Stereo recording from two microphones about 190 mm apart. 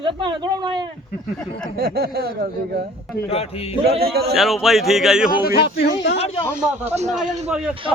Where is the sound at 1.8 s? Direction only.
55° right (ahead or behind).